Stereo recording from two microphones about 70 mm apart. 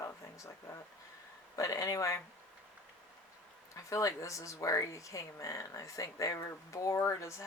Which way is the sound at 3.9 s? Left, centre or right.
Left.